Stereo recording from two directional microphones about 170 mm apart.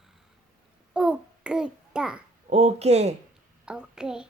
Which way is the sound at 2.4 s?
40° right (ahead or behind).